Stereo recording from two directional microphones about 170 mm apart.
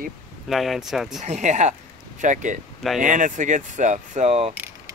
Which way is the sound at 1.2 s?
45° right (ahead or behind).